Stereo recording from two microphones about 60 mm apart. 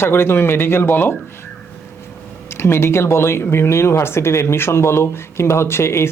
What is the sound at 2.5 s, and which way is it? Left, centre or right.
Speech, left.